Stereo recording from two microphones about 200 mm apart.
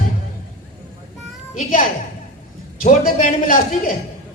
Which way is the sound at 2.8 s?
40° left (ahead or behind).